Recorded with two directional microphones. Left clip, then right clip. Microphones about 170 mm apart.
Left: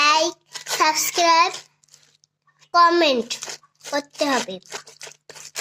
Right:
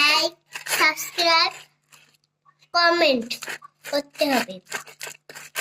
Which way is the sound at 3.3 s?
Centre (ahead or behind).